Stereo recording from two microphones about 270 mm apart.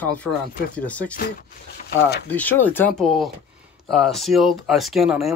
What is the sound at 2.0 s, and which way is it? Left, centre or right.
Speech, left.